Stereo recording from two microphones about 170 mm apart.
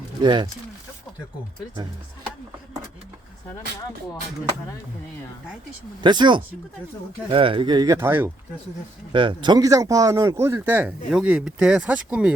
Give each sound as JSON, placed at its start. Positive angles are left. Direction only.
{"t": 0.2, "sound": "speech", "side_deg": -25}
{"t": 6.0, "sound": "speech", "side_deg": -25}
{"t": 7.9, "sound": "speech", "side_deg": -15}
{"t": 9.1, "sound": "speech", "side_deg": -30}